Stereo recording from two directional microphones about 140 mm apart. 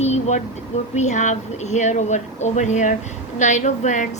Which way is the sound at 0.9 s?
60° left (ahead or behind).